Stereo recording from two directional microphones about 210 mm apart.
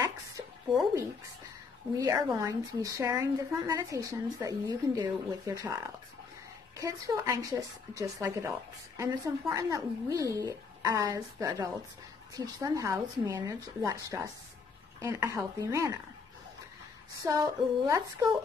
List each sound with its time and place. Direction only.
2.0 s speech: 15° right (ahead or behind)
17.2 s speech: 15° right (ahead or behind)